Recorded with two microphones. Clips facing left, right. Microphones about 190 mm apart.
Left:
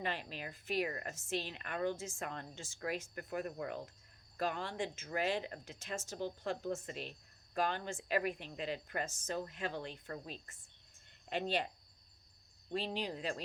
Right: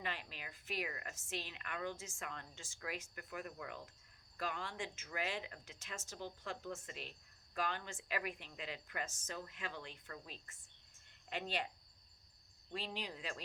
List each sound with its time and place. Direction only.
0.0 s speech: 35° left (ahead or behind)
12.7 s speech: 35° left (ahead or behind)